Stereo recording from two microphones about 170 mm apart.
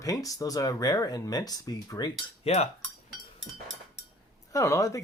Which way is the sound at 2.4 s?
35° left (ahead or behind).